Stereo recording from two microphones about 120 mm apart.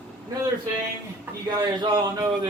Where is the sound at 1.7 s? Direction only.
40° right (ahead or behind).